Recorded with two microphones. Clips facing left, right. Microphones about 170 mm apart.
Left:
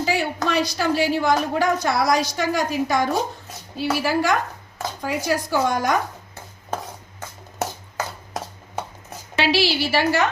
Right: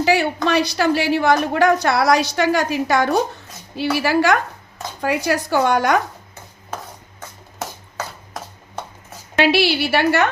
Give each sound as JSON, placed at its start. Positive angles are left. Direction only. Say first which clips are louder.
{"t": 0.0, "sound": "speech", "louder": "right 5 dB", "side_deg": -70}
{"t": 9.4, "sound": "a woman's voice", "louder": "right 4 dB", "side_deg": -60}